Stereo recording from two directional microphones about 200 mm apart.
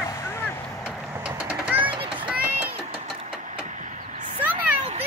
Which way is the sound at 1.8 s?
25° right (ahead or behind).